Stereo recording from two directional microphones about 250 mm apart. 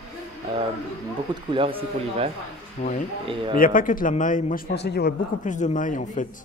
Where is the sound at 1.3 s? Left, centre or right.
Centre.